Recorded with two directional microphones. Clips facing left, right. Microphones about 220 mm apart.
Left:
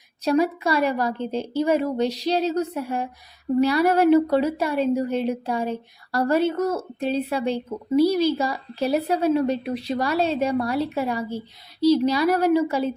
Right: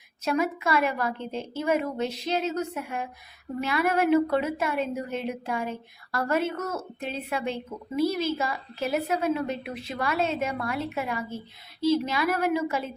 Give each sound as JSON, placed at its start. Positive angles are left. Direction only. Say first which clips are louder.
{"t": 0.3, "sound": "a woman's voice", "louder": "left 5 dB", "side_deg": 35}